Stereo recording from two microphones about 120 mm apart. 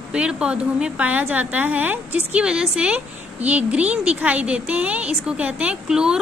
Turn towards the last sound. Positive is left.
turn(degrees=-5)  # may be behind; listen again after turning